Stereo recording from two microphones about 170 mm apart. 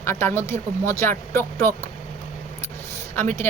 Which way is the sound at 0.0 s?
15° left (ahead or behind).